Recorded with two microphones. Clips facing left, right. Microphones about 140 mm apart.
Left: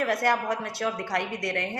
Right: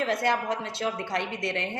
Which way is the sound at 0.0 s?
25° right (ahead or behind).